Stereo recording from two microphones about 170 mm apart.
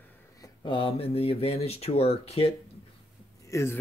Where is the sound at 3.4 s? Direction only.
15° left (ahead or behind).